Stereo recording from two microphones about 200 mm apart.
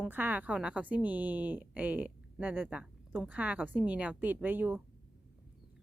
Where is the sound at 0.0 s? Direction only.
10° right (ahead or behind).